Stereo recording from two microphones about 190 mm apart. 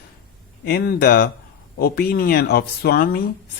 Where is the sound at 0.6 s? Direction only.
55° left (ahead or behind).